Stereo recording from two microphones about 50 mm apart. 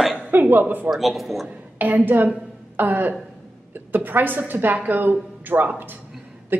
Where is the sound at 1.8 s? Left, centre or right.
Right.